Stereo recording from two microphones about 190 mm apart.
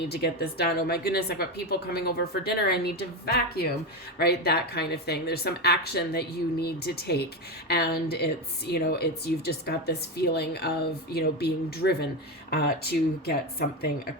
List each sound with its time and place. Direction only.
0.0 s a woman's voice: 55° left (ahead or behind)